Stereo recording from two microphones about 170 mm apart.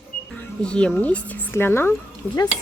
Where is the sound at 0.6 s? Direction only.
5° left (ahead or behind).